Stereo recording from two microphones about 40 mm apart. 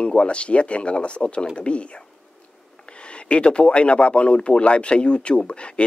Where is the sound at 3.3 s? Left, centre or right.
Left.